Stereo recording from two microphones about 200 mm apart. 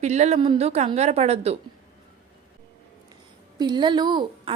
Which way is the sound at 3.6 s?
20° right (ahead or behind).